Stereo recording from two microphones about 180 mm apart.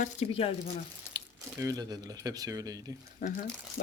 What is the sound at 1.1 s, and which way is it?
Speech, 20° right (ahead or behind).